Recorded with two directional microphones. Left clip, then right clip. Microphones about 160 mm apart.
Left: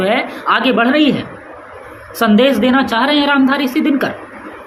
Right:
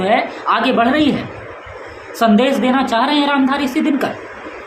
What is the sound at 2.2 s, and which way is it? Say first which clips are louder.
A woman's voice: left 2 dB; 20° left (ahead or behind).